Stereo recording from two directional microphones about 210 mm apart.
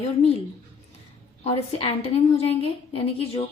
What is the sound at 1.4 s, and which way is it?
A woman's voice, 30° left (ahead or behind).